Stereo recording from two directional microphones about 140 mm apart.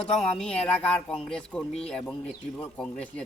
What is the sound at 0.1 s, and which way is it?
Speech, 5° left (ahead or behind).